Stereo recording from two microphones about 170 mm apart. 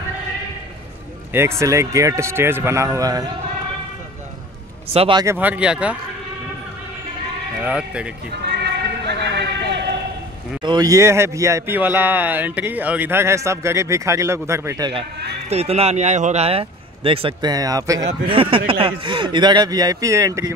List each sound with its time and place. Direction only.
1.3 s a man's voice: 15° right (ahead or behind)
4.8 s speech: 35° right (ahead or behind)
5.2 s a man's voice: 10° right (ahead or behind)
7.6 s a man's voice: 5° right (ahead or behind)
8.5 s a sound: 80° right
10.6 s a man's voice: 25° right (ahead or behind)
15.5 s speech: 40° right (ahead or behind); by 18.0 s 20° right (ahead or behind)
18.3 s speech: 30° right (ahead or behind)